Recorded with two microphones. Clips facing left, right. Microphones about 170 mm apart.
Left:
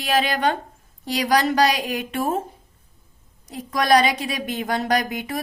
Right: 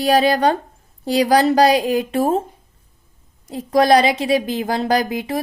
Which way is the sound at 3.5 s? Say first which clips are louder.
Right 5 dB; 30° right (ahead or behind).